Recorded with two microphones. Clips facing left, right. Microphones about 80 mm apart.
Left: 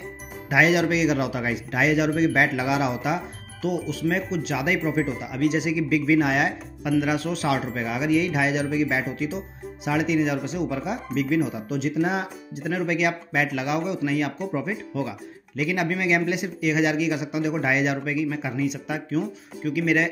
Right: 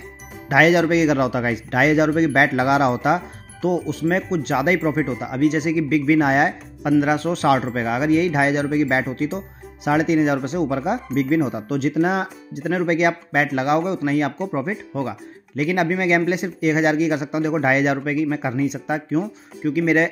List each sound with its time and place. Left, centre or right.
0.5 s speech: right
3.6 s speech: right
11.5 s speech: right
14.5 s speech: right
15.0 s speech: right